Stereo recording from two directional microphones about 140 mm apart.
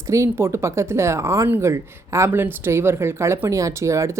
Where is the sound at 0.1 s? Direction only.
20° right (ahead or behind).